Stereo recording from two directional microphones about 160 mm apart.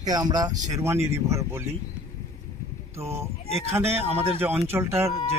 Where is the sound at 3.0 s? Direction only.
15° right (ahead or behind).